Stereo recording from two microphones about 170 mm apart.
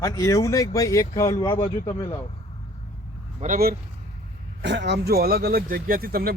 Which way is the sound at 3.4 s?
55° right (ahead or behind).